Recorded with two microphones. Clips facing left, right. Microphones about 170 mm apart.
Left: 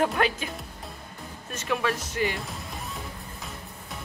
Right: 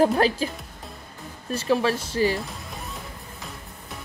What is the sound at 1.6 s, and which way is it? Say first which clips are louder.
Speech: right 5 dB; 30° right (ahead or behind).